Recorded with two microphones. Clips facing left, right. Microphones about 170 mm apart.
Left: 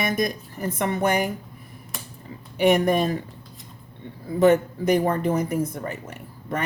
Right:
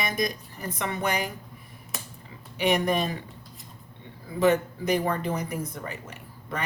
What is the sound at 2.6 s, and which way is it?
Speech, 50° left (ahead or behind).